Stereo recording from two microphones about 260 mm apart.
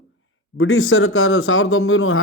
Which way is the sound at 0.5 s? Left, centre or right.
Left.